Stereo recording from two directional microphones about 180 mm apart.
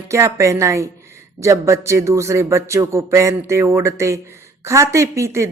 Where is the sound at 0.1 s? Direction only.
15° right (ahead or behind).